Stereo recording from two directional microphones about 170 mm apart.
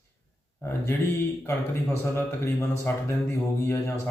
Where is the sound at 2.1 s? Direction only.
15° left (ahead or behind).